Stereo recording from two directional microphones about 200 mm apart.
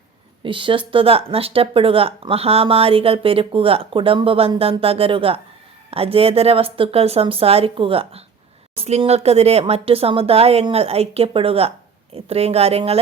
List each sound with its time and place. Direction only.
0.4 s speech: 25° right (ahead or behind)